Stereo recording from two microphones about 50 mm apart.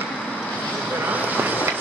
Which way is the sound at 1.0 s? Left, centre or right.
Right.